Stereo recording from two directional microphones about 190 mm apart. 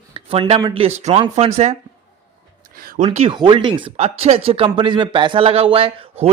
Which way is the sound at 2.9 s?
35° right (ahead or behind).